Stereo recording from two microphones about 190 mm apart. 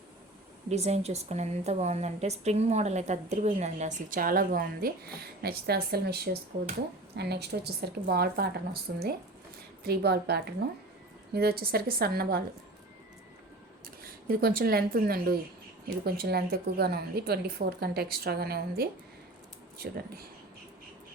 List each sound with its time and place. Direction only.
0.7 s a woman's voice: 35° right (ahead or behind); by 12.4 s 55° right (ahead or behind)
14.0 s a woman's voice: 50° right (ahead or behind)